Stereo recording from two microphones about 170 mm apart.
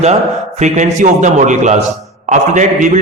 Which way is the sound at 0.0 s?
40° right (ahead or behind).